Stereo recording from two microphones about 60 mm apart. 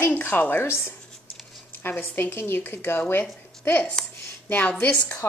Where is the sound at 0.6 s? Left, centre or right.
Left.